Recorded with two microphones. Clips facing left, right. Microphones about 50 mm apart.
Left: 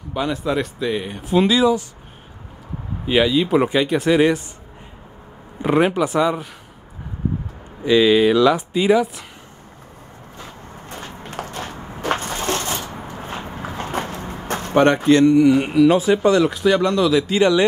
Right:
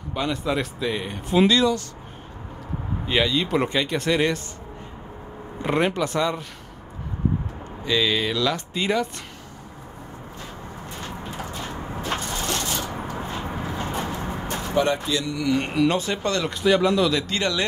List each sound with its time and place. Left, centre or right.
0.1 s speech: centre
3.1 s speech: centre
5.6 s speech: centre
7.8 s speech: centre
11.2 s a sound: left
12.4 s a sound: left
14.5 s a sound: left
15.0 s speech: left
15.5 s speech: centre
17.4 s speech: centre